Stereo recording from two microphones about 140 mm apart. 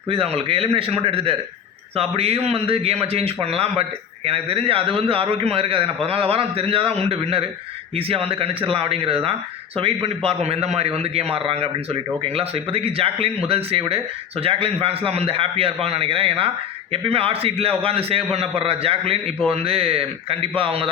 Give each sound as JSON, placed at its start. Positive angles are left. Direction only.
{"t": 0.1, "sound": "a man's voice", "side_deg": -45}